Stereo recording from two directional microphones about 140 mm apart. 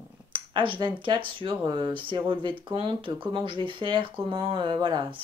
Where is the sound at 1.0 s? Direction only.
35° right (ahead or behind).